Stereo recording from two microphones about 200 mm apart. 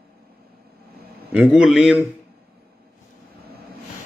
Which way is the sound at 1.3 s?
5° right (ahead or behind).